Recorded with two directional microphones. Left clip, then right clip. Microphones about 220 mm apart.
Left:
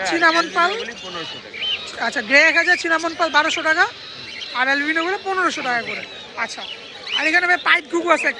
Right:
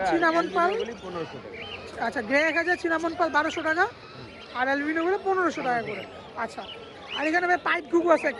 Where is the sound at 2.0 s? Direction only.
5° left (ahead or behind).